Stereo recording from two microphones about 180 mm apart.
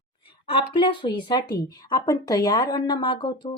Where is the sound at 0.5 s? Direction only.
30° left (ahead or behind).